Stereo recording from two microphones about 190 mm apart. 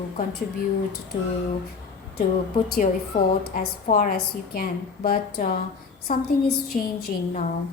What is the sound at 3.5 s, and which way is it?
A woman's voice, 45° left (ahead or behind).